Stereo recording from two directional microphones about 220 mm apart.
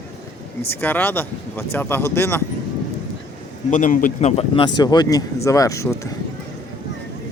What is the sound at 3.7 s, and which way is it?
A man's voice, 40° left (ahead or behind).